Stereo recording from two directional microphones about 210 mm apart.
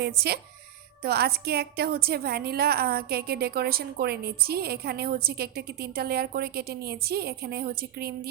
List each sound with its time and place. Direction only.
0.0 s a woman's voice: 50° right (ahead or behind)